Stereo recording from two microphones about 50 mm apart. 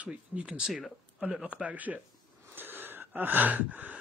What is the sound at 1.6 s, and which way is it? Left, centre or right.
Speech, right.